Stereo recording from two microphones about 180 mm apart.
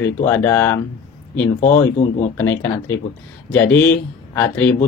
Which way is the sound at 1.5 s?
40° left (ahead or behind).